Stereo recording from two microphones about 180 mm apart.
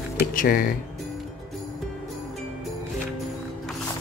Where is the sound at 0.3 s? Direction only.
50° left (ahead or behind).